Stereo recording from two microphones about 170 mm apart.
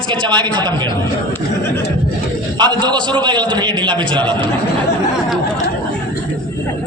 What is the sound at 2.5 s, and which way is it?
A man's voice, 25° right (ahead or behind).